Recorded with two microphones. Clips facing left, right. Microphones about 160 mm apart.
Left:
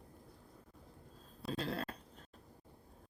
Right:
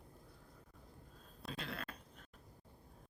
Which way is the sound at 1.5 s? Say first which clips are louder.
Left 7 dB; 35° left (ahead or behind).